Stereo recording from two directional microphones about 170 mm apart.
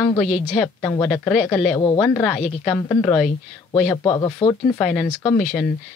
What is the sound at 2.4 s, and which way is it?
Speech, 10° left (ahead or behind).